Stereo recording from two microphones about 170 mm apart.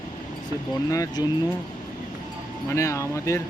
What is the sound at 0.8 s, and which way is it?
Speech, 20° left (ahead or behind).